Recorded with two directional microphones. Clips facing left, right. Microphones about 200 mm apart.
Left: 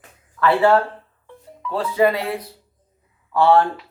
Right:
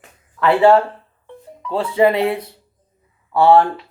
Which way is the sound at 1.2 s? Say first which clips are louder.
Right 1 dB; 25° right (ahead or behind).